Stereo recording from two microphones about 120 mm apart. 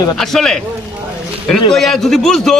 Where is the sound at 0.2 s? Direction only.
5° left (ahead or behind).